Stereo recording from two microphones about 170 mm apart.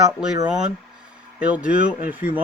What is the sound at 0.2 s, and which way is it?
Speech, 5° right (ahead or behind).